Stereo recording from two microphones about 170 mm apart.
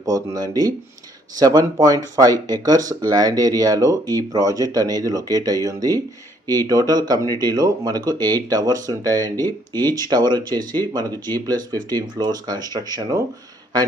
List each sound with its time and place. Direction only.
0.0 s speech: 20° right (ahead or behind)